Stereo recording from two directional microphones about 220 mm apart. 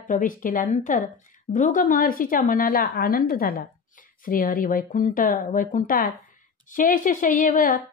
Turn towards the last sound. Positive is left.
turn(degrees=40)  # may be behind; listen again after turning